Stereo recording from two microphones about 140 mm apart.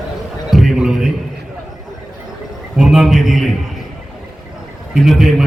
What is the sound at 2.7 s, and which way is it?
Speech, 5° right (ahead or behind).